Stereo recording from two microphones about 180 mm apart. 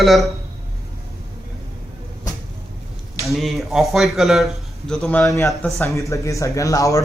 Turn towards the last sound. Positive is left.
turn(degrees=20)  # may be behind; listen again after turning